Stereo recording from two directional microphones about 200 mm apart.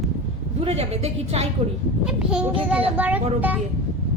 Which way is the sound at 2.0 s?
5° right (ahead or behind).